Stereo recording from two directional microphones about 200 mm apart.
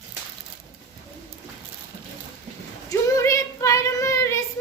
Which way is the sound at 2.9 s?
15° left (ahead or behind).